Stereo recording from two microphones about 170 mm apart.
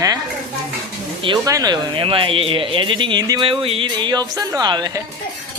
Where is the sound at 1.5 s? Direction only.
20° right (ahead or behind).